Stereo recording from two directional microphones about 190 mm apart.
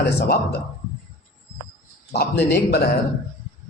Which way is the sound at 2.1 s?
55° left (ahead or behind).